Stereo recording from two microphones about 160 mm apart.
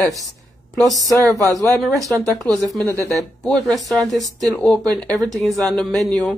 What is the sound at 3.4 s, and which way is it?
Speech, 5° left (ahead or behind).